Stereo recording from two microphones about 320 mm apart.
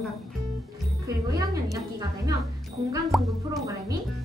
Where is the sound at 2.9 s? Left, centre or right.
Centre.